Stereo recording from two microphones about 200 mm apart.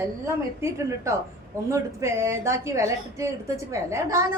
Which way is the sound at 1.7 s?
15° right (ahead or behind).